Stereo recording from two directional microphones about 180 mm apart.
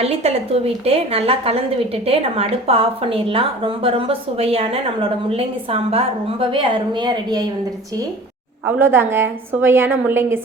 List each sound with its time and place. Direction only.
0.0 s a woman's voice: 35° right (ahead or behind)
8.6 s a woman's voice: 10° right (ahead or behind)